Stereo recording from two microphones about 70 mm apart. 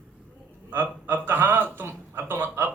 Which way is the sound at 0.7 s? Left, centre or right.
Right.